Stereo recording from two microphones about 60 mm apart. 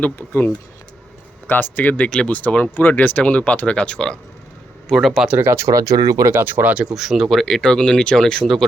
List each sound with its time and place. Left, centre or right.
0.0 s speech: left
2.0 s speech: centre
2.3 s speech: left
4.9 s speech: centre
5.4 s speech: right
5.7 s speech: right
6.3 s speech: right
6.9 s speech: centre